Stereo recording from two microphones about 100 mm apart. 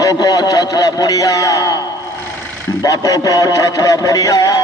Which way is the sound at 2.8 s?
35° left (ahead or behind).